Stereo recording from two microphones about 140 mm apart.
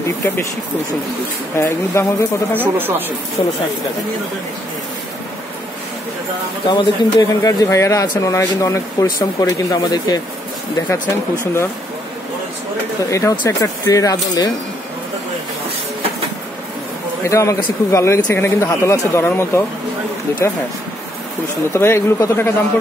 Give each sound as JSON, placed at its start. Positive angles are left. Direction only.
{"t": 1.6, "sound": "speech", "side_deg": 20}
{"t": 2.5, "sound": "speech", "side_deg": -15}
{"t": 6.7, "sound": "speech", "side_deg": 30}
{"t": 13.1, "sound": "speech", "side_deg": 25}
{"t": 17.2, "sound": "speech", "side_deg": 20}
{"t": 21.7, "sound": "speech", "side_deg": 20}